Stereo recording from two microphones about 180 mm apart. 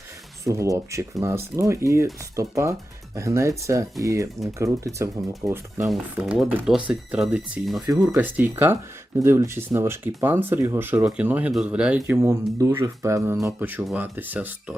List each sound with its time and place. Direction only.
0.4 s speech: 15° right (ahead or behind)
5.8 s speech: 5° right (ahead or behind)